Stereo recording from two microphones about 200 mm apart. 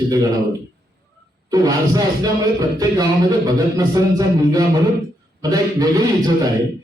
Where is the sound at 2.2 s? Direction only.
20° right (ahead or behind).